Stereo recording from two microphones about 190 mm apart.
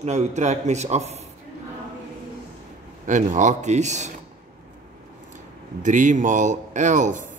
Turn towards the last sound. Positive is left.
turn(degrees=-40)  # may be behind; listen again after turning